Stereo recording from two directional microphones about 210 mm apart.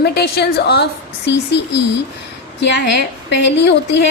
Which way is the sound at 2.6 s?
55° left (ahead or behind).